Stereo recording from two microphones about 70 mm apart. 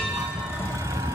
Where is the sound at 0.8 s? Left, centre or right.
Right.